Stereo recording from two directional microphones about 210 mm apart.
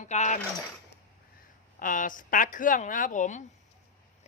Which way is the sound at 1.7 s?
40° left (ahead or behind).